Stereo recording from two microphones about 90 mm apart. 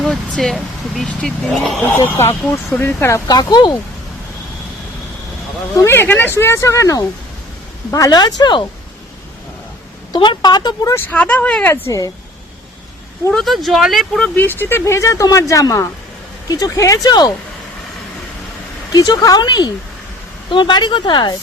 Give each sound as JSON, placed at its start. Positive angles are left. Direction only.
{"t": 0.0, "sound": "speech", "side_deg": 5}
{"t": 2.0, "sound": "speech", "side_deg": 30}
{"t": 3.2, "sound": "speech", "side_deg": 50}
{"t": 5.7, "sound": "speech", "side_deg": 30}
{"t": 10.1, "sound": "speech", "side_deg": 55}
{"t": 10.9, "sound": "speech", "side_deg": 20}
{"t": 11.6, "sound": "speech", "side_deg": 30}
{"t": 13.3, "sound": "speech", "side_deg": 0}
{"t": 14.2, "sound": "speech", "side_deg": 20}
{"t": 18.9, "sound": "speech", "side_deg": 45}